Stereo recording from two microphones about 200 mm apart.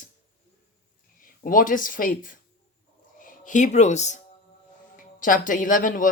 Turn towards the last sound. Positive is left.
turn(degrees=40)  # may be behind; listen again after turning